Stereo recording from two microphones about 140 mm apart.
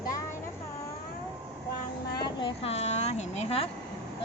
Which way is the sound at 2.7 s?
50° left (ahead or behind).